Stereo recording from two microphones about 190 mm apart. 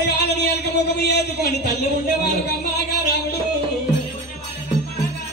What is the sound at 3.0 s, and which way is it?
Speech, 60° left (ahead or behind).